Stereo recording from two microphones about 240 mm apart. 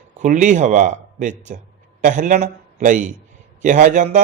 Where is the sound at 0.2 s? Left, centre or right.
Right.